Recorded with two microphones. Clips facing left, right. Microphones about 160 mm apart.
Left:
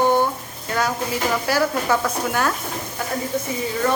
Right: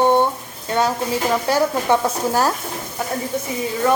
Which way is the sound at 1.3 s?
25° right (ahead or behind).